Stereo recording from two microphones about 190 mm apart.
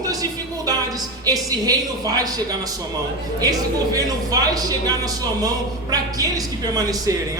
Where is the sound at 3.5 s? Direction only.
20° right (ahead or behind).